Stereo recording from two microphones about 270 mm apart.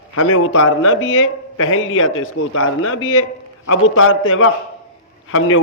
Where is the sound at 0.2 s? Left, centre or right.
Left.